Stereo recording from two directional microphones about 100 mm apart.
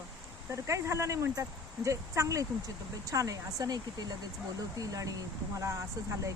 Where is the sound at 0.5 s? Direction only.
30° right (ahead or behind).